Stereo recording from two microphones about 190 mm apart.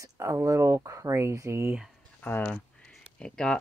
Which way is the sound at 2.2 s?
10° left (ahead or behind).